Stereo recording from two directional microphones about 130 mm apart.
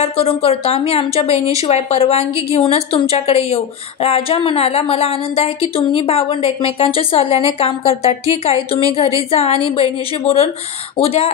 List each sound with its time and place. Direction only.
0.0 s a woman's voice: 50° left (ahead or behind)